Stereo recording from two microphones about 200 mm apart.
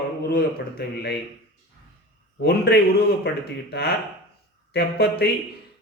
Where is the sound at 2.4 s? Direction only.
55° left (ahead or behind).